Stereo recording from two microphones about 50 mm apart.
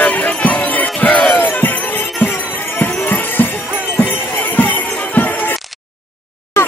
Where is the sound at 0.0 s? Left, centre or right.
Left.